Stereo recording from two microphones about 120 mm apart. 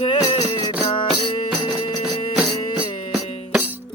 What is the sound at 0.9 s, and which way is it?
Music, 45° left (ahead or behind).